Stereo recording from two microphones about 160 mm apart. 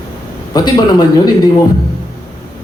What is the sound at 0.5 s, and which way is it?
Speech, 25° left (ahead or behind).